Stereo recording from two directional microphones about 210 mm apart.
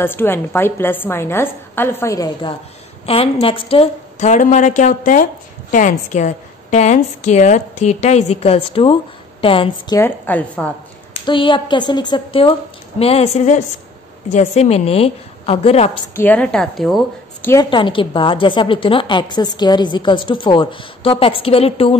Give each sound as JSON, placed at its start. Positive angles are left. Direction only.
{"t": 0.0, "sound": "a woman's voice", "side_deg": 10}
{"t": 9.9, "sound": "a woman's voice", "side_deg": 10}
{"t": 11.2, "sound": "a woman's voice", "side_deg": 25}
{"t": 16.2, "sound": "a woman's voice", "side_deg": 5}
{"t": 17.5, "sound": "a woman's voice", "side_deg": 20}